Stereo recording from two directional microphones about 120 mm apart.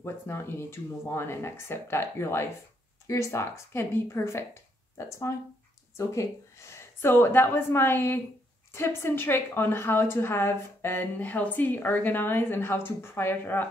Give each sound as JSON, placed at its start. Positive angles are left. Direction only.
{"t": 0.0, "sound": "a woman's voice", "side_deg": 20}